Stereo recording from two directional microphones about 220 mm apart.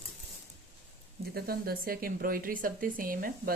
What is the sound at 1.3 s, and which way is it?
Speech, 45° right (ahead or behind).